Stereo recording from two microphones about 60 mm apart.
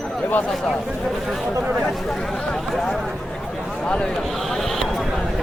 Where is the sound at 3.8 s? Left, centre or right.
Centre.